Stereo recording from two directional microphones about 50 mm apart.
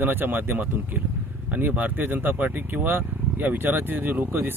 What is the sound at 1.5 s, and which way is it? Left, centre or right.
Speech, right.